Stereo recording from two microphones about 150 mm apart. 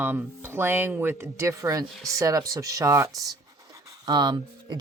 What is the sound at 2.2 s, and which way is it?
Speech, 25° right (ahead or behind).